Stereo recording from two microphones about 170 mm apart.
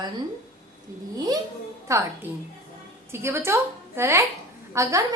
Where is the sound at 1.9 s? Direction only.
15° right (ahead or behind).